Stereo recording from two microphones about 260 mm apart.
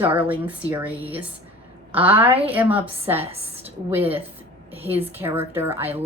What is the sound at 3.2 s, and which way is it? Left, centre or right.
Speech, right.